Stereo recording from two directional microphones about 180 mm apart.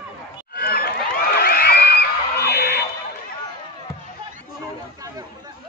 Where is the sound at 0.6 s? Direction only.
55° left (ahead or behind).